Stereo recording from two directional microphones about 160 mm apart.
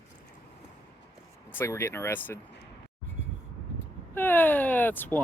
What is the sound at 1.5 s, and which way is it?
Speech, 15° left (ahead or behind).